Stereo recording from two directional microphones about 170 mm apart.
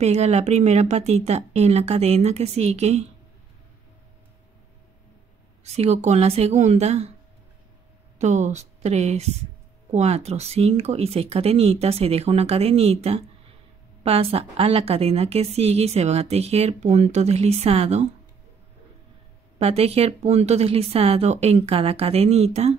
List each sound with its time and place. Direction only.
0.0 s a woman's voice: 40° right (ahead or behind)
5.6 s a woman's voice: 40° right (ahead or behind)
8.2 s a woman's voice: 45° right (ahead or behind)
19.6 s a woman's voice: 35° right (ahead or behind)